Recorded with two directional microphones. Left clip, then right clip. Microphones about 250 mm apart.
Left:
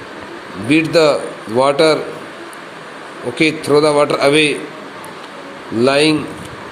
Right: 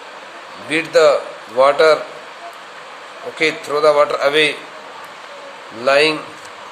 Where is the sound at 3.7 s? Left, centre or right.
Centre.